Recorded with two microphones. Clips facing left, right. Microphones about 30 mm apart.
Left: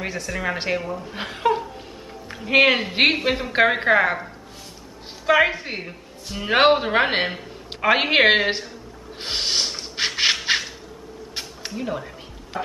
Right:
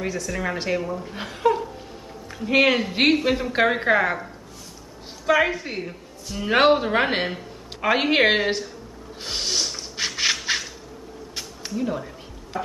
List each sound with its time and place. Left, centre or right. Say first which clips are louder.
0.0 s a woman's voice: even; left
9.2 s a sound: left 2 dB; left
12.5 s music: even; left